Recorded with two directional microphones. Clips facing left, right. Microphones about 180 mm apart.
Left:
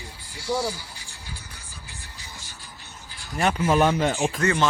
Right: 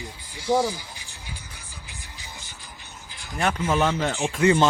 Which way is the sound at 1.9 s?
20° right (ahead or behind).